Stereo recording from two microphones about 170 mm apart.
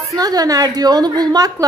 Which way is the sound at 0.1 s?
20° right (ahead or behind).